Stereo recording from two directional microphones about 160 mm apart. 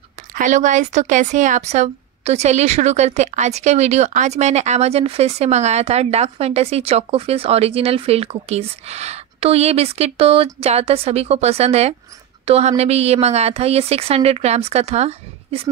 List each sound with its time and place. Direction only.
0.3 s speech: 50° right (ahead or behind)